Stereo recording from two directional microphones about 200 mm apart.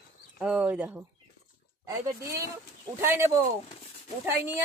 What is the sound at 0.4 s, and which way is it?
Speech, 5° right (ahead or behind).